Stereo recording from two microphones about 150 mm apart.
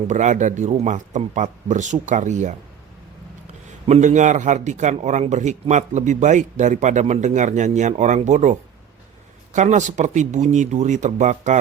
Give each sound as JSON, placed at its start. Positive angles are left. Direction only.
{"t": 0.1, "sound": "a man's voice", "side_deg": -55}
{"t": 3.8, "sound": "a man's voice", "side_deg": -50}